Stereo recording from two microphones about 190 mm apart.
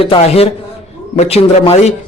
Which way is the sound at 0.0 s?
30° left (ahead or behind).